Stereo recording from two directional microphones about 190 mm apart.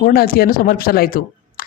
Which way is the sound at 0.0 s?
50° left (ahead or behind).